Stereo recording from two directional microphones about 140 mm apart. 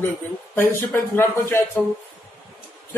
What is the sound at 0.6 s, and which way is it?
A man's voice, 15° left (ahead or behind).